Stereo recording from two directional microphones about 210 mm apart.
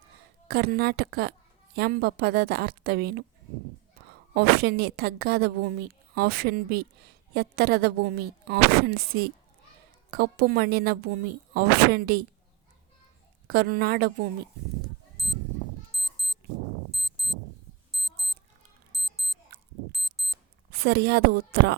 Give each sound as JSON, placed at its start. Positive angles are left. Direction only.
{"t": 0.4, "sound": "a woman's voice", "side_deg": -45}
{"t": 4.4, "sound": "a woman's voice", "side_deg": -45}
{"t": 10.1, "sound": "a woman's voice", "side_deg": -45}
{"t": 13.5, "sound": "a woman's voice", "side_deg": -45}
{"t": 15.2, "sound": "a sound", "side_deg": 0}
{"t": 16.9, "sound": "clock", "side_deg": 0}
{"t": 17.9, "sound": "a sound", "side_deg": 0}
{"t": 19.9, "sound": "alarm clock", "side_deg": 0}
{"t": 20.7, "sound": "a woman's voice", "side_deg": -45}